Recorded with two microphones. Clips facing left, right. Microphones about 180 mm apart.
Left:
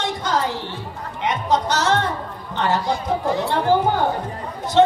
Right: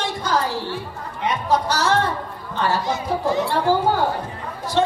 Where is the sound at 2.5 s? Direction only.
20° left (ahead or behind).